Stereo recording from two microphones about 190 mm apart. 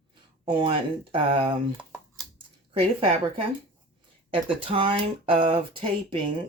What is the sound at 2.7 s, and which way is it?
Speech, 30° right (ahead or behind).